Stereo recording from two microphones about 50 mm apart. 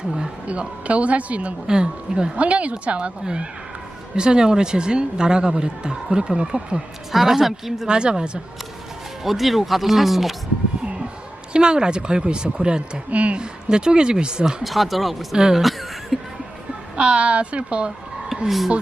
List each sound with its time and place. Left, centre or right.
0.4 s speech: right; by 7.9 s centre
7.9 s speech: centre
9.2 s speech: centre
11.5 s speech: centre
13.1 s speech: right
13.4 s speech: centre
14.6 s speech: centre
15.4 s speech: centre
16.1 s a sound: centre
17.0 s speech: right
18.4 s speech: centre